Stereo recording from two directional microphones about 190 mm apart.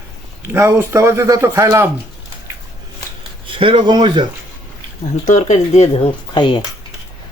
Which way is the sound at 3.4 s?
25° right (ahead or behind).